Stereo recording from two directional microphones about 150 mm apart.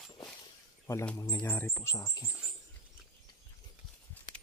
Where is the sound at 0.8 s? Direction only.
10° left (ahead or behind).